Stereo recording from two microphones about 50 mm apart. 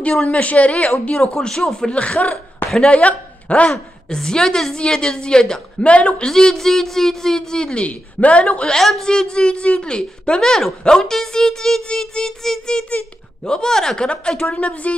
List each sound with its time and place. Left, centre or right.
0.1 s a woman's voice: left
1.9 s a woman's voice: left
3.7 s a woman's voice: centre
6.2 s a woman's voice: centre
8.7 s a woman's voice: centre
9.0 s a woman's voice: centre